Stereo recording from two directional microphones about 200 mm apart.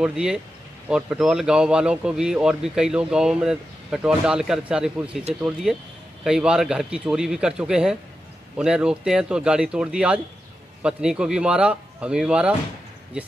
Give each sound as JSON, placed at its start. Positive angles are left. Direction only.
{"t": 0.0, "sound": "speech", "side_deg": -5}